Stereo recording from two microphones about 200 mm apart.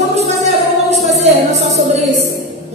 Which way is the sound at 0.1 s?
35° right (ahead or behind).